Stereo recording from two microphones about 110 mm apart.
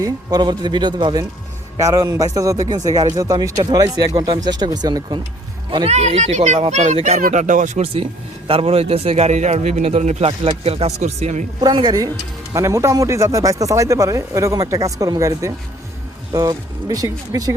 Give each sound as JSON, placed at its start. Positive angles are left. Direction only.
{"t": 0.0, "sound": "a man's voice", "side_deg": -35}
{"t": 1.8, "sound": "a man's voice", "side_deg": -30}
{"t": 5.9, "sound": "speech", "side_deg": -90}
{"t": 8.4, "sound": "a man's voice", "side_deg": -60}
{"t": 11.6, "sound": "a man's voice", "side_deg": -40}
{"t": 12.5, "sound": "a man's voice", "side_deg": -25}